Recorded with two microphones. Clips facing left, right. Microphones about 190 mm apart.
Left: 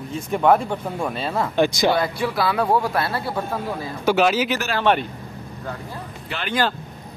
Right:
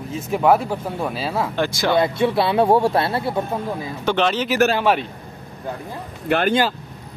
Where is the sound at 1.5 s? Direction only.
15° left (ahead or behind).